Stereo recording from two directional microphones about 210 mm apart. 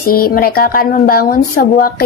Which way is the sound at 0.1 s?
45° left (ahead or behind).